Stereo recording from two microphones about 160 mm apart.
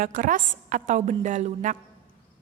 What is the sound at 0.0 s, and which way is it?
A woman's voice, 55° right (ahead or behind).